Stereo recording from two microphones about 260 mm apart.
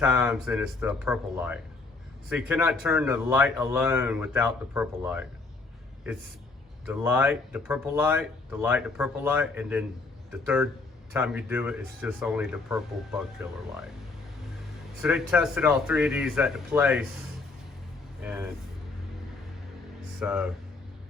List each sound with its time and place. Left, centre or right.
0.0 s speech: centre
6.8 s speech: centre
15.0 s speech: centre
18.2 s speech: centre
20.1 s speech: centre